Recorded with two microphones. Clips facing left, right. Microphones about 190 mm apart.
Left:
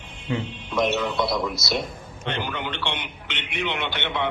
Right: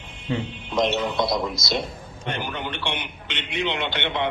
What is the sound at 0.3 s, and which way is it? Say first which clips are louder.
Speech: right 1 dB; 30° right (ahead or behind).